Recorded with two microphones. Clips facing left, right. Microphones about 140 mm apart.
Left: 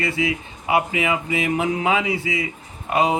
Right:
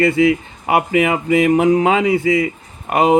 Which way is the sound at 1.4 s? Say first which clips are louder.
Right 10 dB; 40° right (ahead or behind).